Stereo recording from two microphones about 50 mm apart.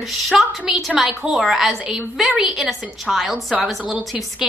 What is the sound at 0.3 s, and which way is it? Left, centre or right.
A woman's voice, centre.